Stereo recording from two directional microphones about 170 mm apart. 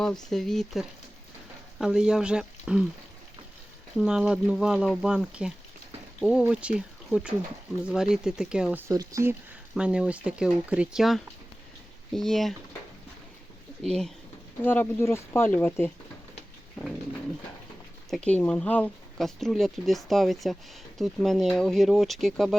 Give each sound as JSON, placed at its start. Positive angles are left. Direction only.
{"t": 0.0, "sound": "speech", "side_deg": 0}
{"t": 3.9, "sound": "speech", "side_deg": -5}
{"t": 8.9, "sound": "speech", "side_deg": -20}
{"t": 9.7, "sound": "speech", "side_deg": -5}
{"t": 13.8, "sound": "speech", "side_deg": 5}
{"t": 18.1, "sound": "speech", "side_deg": 5}